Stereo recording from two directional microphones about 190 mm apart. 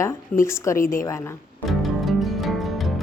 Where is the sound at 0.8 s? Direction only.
45° left (ahead or behind).